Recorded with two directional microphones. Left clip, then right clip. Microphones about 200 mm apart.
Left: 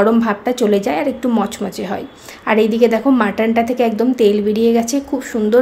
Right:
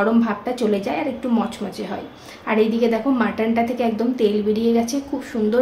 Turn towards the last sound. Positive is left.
turn(degrees=45)  # may be behind; listen again after turning